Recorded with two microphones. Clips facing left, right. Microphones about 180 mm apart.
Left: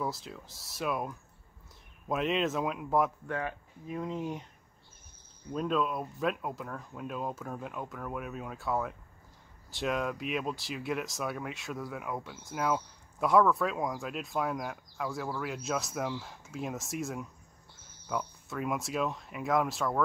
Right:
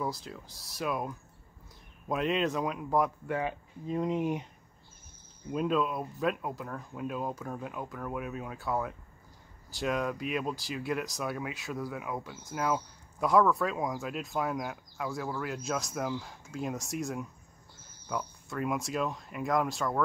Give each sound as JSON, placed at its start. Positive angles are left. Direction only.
{"t": 0.0, "sound": "speech", "side_deg": 0}
{"t": 3.3, "sound": "speech", "side_deg": -10}
{"t": 3.8, "sound": "speech", "side_deg": -20}
{"t": 5.5, "sound": "speech", "side_deg": -5}